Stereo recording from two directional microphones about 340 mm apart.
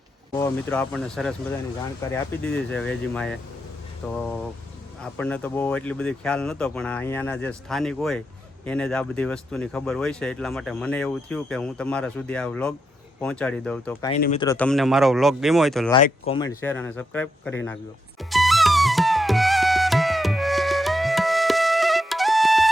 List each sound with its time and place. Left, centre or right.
0.3 s speech: centre
14.1 s speech: centre
14.4 s speech: centre
16.0 s speech: centre
18.2 s flute: centre